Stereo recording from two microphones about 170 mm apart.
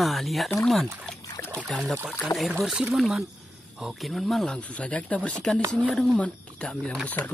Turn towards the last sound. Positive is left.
turn(degrees=10)  # may be behind; listen again after turning